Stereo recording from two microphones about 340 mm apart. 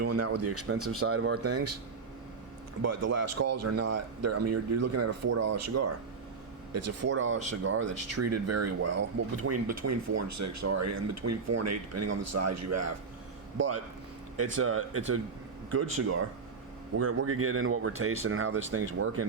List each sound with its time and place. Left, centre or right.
0.0 s speech: right
2.8 s speech: right
7.1 s speech: right
8.0 s speech: right
17.0 s speech: right